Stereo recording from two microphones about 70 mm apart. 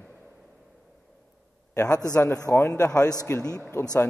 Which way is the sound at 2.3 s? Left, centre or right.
Left.